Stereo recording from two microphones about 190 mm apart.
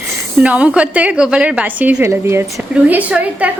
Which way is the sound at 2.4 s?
5° right (ahead or behind).